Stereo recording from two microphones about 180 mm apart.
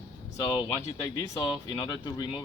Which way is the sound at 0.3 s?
20° left (ahead or behind).